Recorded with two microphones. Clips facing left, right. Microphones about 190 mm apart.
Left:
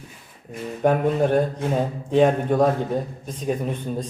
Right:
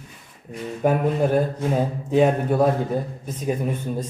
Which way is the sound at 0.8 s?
5° right (ahead or behind).